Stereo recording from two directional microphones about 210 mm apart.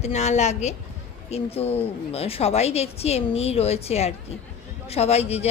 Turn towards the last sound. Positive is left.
turn(degrees=30)  # may be behind; listen again after turning